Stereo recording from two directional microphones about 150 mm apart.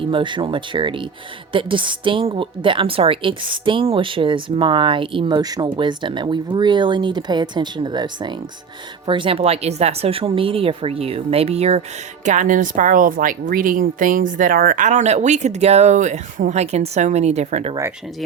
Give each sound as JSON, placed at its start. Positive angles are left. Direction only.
{"t": 0.1, "sound": "a woman's voice", "side_deg": -30}
{"t": 12.2, "sound": "speech", "side_deg": -55}